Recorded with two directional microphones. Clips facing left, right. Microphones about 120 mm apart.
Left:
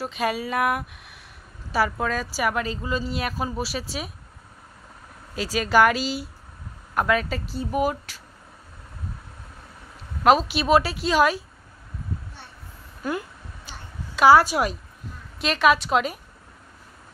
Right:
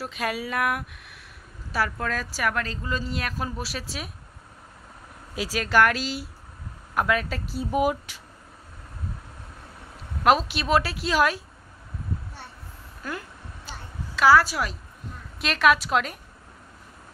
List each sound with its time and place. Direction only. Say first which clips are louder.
0.0 s a woman's voice: left 3 dB; centre (ahead or behind)
5.3 s speech: left 2 dB; 10° right (ahead or behind)
5.6 s a woman's voice: left 3 dB; 5° left (ahead or behind)
7.7 s speech: right 1 dB; 15° right (ahead or behind)
10.2 s a woman's voice: left 3 dB; centre (ahead or behind)
13.0 s speech: left 6 dB; 15° left (ahead or behind)
13.7 s a sound: right 1 dB; 15° left (ahead or behind)
15.3 s a woman's voice: left 1 dB; centre (ahead or behind)